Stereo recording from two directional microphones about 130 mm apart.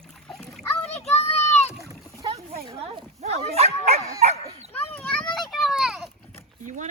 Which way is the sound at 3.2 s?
55° right (ahead or behind).